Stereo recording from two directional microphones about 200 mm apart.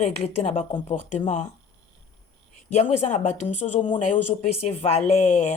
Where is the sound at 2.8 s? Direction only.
35° left (ahead or behind).